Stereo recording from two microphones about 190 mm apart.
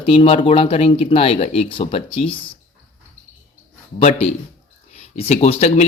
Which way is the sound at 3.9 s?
35° left (ahead or behind).